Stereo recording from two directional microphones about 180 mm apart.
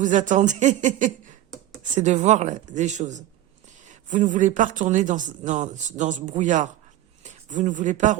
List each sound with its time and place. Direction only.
0.0 s speech: 45° right (ahead or behind)